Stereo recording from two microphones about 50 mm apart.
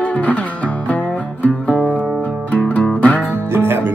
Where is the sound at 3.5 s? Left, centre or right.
Right.